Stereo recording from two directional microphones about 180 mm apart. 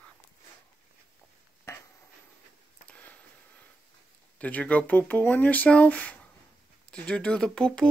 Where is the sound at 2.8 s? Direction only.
5° left (ahead or behind).